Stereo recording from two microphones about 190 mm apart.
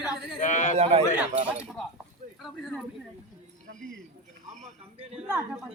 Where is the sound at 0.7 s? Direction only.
30° right (ahead or behind).